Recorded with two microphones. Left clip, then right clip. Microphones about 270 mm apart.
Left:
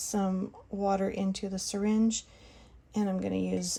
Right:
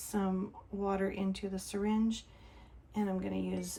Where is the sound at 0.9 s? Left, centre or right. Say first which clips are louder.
Left 5 dB; centre.